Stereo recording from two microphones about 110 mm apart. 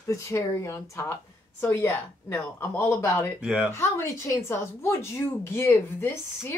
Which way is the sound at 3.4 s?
10° right (ahead or behind).